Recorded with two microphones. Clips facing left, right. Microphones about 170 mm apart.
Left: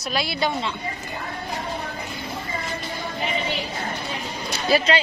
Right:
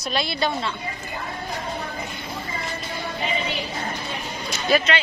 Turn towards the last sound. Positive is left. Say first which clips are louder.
# left 1 dB
turn(degrees=30)  # may be behind; listen again after turning